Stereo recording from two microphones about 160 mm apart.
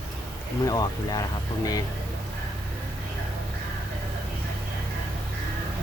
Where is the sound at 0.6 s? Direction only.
25° left (ahead or behind).